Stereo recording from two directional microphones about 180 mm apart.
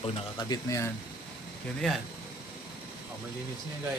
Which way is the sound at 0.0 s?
25° left (ahead or behind).